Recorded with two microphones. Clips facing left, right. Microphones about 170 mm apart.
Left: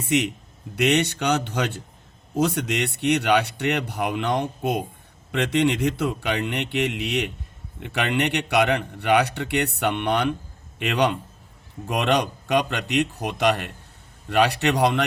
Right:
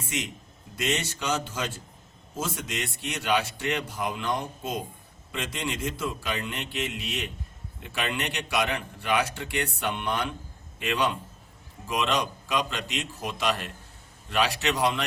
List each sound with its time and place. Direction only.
0.0 s a man's voice: 70° left (ahead or behind)